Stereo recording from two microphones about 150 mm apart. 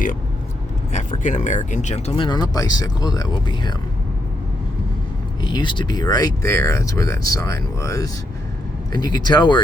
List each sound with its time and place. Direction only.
0.9 s speech: 50° left (ahead or behind)
2.1 s speech: 30° left (ahead or behind)
5.4 s speech: 30° left (ahead or behind)